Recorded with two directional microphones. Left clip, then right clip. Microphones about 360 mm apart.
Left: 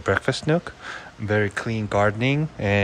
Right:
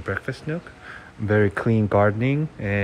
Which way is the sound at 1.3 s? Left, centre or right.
Centre.